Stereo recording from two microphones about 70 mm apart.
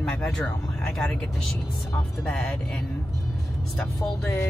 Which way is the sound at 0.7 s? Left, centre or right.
Centre.